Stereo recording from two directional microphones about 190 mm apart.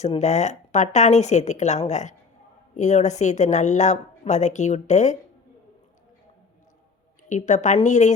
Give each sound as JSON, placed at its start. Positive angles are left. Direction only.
{"t": 0.0, "sound": "a woman's voice", "side_deg": 35}
{"t": 7.3, "sound": "a woman's voice", "side_deg": 40}